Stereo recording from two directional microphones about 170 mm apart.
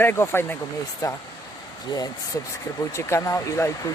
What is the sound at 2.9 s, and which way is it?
Speech, 15° left (ahead or behind).